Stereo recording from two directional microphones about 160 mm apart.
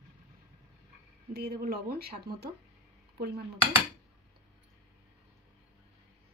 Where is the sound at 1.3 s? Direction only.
85° right.